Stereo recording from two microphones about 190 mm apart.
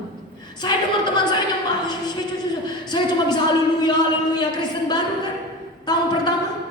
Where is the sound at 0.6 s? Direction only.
20° left (ahead or behind).